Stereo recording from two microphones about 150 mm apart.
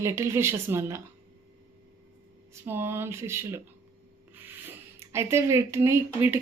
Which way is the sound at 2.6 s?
15° right (ahead or behind).